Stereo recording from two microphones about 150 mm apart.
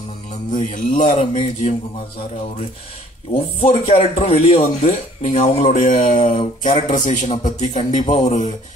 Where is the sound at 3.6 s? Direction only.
40° left (ahead or behind).